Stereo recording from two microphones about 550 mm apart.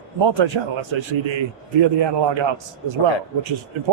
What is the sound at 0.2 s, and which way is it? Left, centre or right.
A man's voice, right.